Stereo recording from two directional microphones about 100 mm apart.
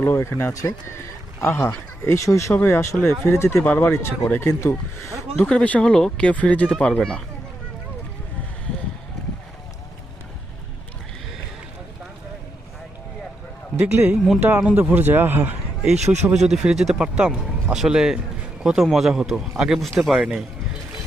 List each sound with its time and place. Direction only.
0.0 s speech: 25° left (ahead or behind)
5.4 s speech: 10° left (ahead or behind)
13.9 s a man's voice: 15° right (ahead or behind)